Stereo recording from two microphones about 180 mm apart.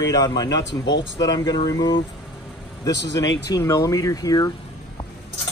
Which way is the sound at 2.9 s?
75° left (ahead or behind).